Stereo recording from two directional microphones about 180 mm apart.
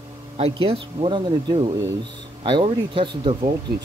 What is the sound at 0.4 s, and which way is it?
Speech, 30° right (ahead or behind).